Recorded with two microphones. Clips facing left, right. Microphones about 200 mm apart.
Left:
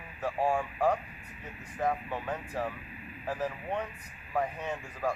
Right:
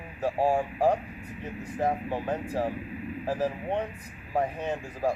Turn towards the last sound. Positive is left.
turn(degrees=-30)  # may be behind; listen again after turning